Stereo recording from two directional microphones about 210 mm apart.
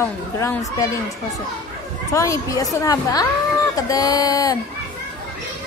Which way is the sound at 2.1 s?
15° left (ahead or behind).